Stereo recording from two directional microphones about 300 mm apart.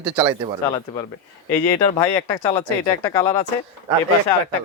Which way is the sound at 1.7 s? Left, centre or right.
Centre.